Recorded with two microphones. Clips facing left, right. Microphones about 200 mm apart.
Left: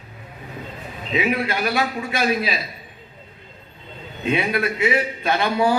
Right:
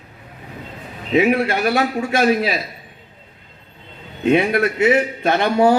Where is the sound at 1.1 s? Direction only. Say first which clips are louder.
Right 6 dB; 50° right (ahead or behind).